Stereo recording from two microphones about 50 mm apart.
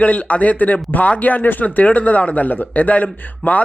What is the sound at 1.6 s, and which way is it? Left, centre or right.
Speech, left.